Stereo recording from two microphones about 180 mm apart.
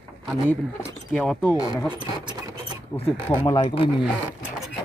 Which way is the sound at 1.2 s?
5° left (ahead or behind).